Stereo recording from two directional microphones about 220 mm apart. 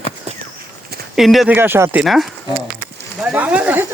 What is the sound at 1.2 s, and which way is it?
Speech, centre (ahead or behind).